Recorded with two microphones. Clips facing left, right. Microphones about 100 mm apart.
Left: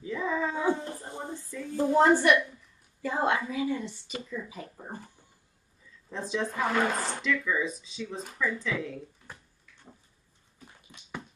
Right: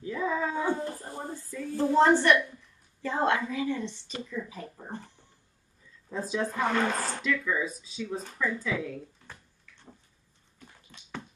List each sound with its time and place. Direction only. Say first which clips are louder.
0.0 s dog: even; 5° right (ahead or behind)
0.8 s a sound: right 2 dB; 20° left (ahead or behind)
1.8 s a woman's voice: even; 15° left (ahead or behind)
4.5 s a sound: right 1 dB; centre (ahead or behind)
6.0 s speech: right 1 dB; 5° right (ahead or behind)
10.6 s music: even; 15° left (ahead or behind)